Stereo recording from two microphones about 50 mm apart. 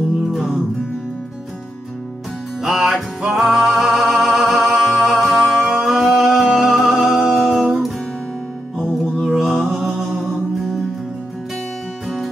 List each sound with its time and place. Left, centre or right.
0.3 s music: centre
2.6 s music: centre
9.0 s mantra: centre
10.1 s music: centre